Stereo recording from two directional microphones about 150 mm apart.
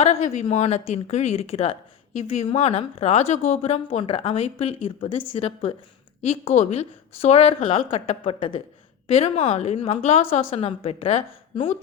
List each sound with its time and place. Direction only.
0.0 s a woman's voice: 45° left (ahead or behind)
9.0 s speech: 45° left (ahead or behind)